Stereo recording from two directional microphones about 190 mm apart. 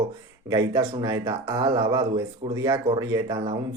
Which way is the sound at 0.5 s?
15° right (ahead or behind).